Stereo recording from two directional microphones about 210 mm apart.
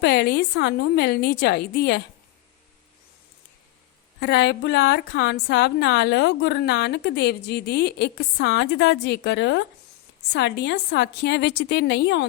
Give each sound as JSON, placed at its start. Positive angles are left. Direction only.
{"t": 0.0, "sound": "a woman's voice", "side_deg": 50}
{"t": 4.2, "sound": "a woman's voice", "side_deg": 50}